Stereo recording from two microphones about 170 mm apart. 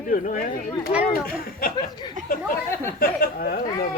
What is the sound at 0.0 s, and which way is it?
Speech, 50° left (ahead or behind).